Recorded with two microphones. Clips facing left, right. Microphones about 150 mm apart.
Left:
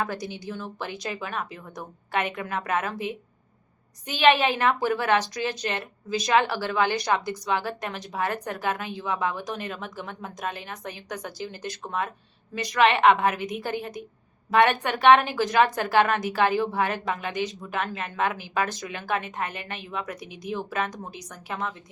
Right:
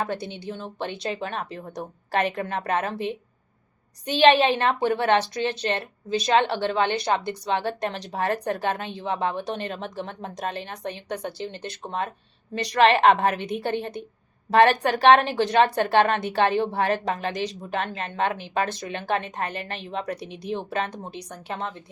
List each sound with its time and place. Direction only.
0.0 s a woman's voice: 25° right (ahead or behind)